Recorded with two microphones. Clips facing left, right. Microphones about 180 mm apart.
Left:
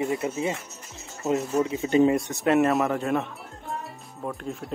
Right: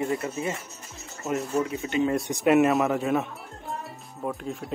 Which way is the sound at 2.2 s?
15° right (ahead or behind).